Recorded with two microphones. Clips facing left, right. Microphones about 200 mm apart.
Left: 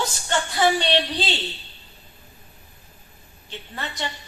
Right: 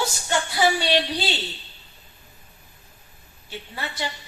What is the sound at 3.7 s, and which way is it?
Speech, 10° right (ahead or behind).